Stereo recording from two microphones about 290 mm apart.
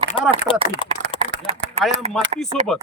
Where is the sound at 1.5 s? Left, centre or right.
Right.